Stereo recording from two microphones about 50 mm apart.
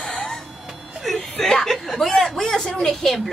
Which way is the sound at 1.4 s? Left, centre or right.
Centre.